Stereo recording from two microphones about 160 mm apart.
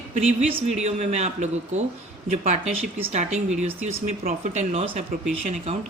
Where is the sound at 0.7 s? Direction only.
45° right (ahead or behind).